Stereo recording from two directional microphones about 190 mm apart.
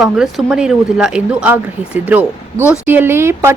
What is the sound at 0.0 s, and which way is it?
Speech, centre (ahead or behind).